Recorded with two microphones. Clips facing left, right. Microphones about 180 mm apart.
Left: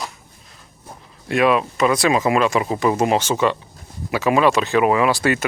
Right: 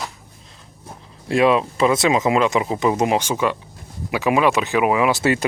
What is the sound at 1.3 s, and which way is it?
Speech, 25° right (ahead or behind).